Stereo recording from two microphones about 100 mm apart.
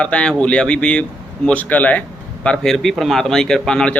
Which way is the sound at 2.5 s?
5° left (ahead or behind).